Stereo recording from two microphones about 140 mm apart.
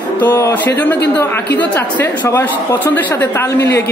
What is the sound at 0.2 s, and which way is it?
Speech, 15° left (ahead or behind).